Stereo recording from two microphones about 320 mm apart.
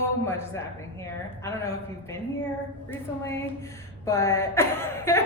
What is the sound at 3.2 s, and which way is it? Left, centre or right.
A man's voice, centre.